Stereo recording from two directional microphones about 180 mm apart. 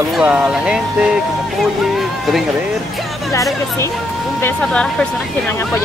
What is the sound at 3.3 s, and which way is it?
Speech, 15° left (ahead or behind).